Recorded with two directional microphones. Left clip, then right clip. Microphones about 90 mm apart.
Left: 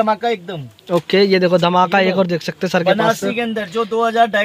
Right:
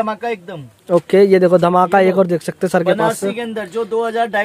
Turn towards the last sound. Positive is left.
turn(degrees=-10)  # may be behind; listen again after turning